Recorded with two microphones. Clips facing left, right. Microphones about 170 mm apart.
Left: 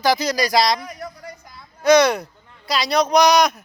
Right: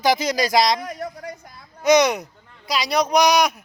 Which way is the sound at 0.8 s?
50° right (ahead or behind).